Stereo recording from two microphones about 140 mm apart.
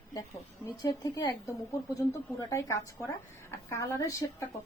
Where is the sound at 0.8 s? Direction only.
25° left (ahead or behind).